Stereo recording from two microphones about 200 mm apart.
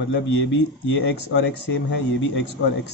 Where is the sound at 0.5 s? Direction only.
65° left (ahead or behind).